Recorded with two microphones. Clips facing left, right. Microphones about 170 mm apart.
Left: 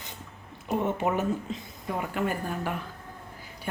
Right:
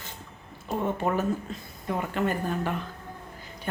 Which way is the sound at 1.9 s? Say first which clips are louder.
Right 1 dB; 5° left (ahead or behind).